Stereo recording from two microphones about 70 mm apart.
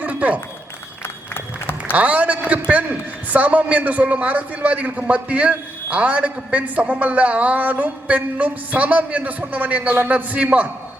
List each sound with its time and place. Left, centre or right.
0.0 s a sound: right
1.0 s applause: left
1.9 s a man's voice: right